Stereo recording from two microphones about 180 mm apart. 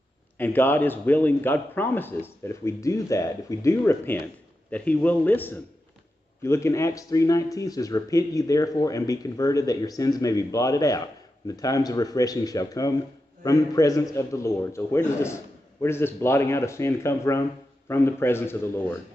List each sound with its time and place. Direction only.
0.4 s a man's voice: 10° left (ahead or behind)